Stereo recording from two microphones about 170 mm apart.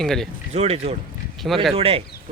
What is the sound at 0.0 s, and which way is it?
Speech, centre (ahead or behind).